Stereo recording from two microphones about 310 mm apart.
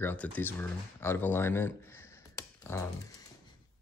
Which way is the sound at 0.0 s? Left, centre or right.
Centre.